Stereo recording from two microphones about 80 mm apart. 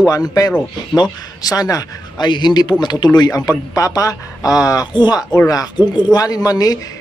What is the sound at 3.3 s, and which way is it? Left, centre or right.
A man's voice, left.